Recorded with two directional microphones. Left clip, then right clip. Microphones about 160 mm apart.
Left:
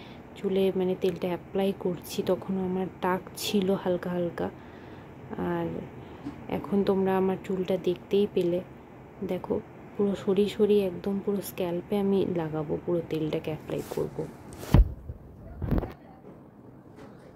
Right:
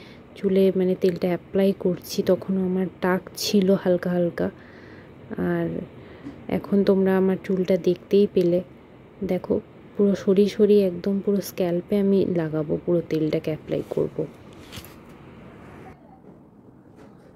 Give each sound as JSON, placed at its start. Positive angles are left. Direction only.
{"t": 0.4, "sound": "speech", "side_deg": -35}